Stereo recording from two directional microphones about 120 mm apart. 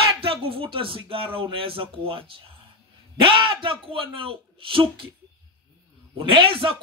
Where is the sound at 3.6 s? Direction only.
45° right (ahead or behind).